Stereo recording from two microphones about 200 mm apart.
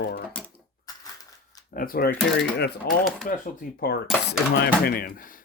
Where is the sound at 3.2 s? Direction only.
40° left (ahead or behind).